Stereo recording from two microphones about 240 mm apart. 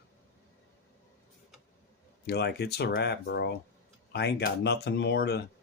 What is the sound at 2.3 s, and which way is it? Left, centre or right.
Speech, left.